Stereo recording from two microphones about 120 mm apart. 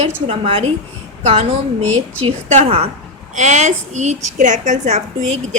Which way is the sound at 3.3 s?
75° right (ahead or behind).